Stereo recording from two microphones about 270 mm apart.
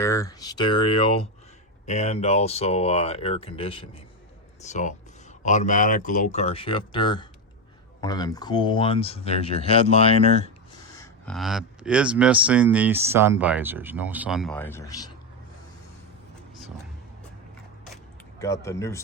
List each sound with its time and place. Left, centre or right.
0.0 s speech: centre
10.9 s a sound: centre
11.3 s speech: centre
18.3 s speech: centre